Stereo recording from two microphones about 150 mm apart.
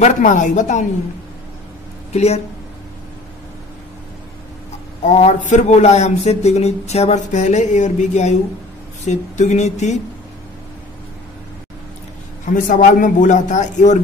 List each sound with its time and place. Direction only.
0.0 s a man's voice: 55° left (ahead or behind)
2.1 s a man's voice: 45° left (ahead or behind)
5.0 s a man's voice: 50° left (ahead or behind)
12.4 s a man's voice: 60° left (ahead or behind)